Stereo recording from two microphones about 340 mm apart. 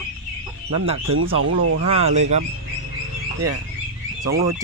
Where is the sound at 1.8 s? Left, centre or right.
Centre.